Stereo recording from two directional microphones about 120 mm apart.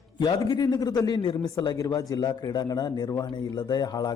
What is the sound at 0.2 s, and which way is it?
A man's voice, 30° left (ahead or behind).